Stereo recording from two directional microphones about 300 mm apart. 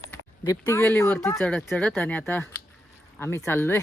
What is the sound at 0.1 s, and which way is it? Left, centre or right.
Speech, centre.